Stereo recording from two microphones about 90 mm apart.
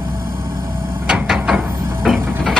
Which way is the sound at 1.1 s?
5° right (ahead or behind).